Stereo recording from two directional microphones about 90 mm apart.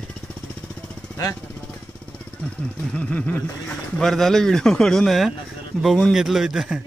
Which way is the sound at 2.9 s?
15° left (ahead or behind).